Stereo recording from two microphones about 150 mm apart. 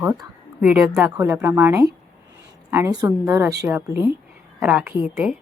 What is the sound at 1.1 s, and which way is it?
A woman's voice, 20° right (ahead or behind).